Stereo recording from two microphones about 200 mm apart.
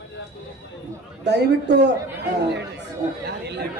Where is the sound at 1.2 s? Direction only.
60° right (ahead or behind).